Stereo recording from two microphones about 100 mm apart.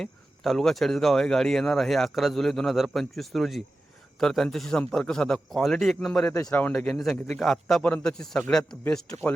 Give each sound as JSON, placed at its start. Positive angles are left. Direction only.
{"t": 0.0, "sound": "speech", "side_deg": 5}
{"t": 6.5, "sound": "speech", "side_deg": 15}
{"t": 6.9, "sound": "speech", "side_deg": 5}